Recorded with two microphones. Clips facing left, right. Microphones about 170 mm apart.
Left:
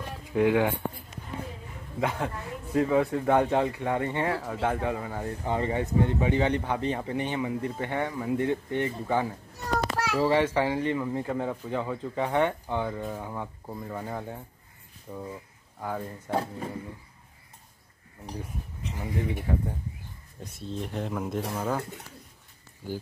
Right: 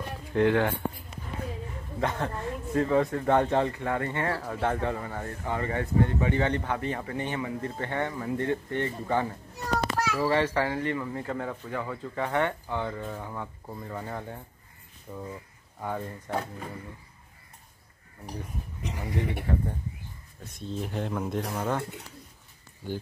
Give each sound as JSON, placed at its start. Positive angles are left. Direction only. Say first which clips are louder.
{"t": 0.3, "sound": "speech", "louder": "left 1 dB", "side_deg": 10}
{"t": 2.0, "sound": "speech", "louder": "even", "side_deg": 10}
{"t": 4.4, "sound": "speech", "louder": "even", "side_deg": 5}
{"t": 16.3, "sound": "speech", "louder": "left 4 dB", "side_deg": 30}
{"t": 18.8, "sound": "speech", "louder": "even", "side_deg": -75}
{"t": 20.5, "sound": "speech", "louder": "right 1 dB", "side_deg": 0}
{"t": 22.8, "sound": "speech", "louder": "even", "side_deg": 10}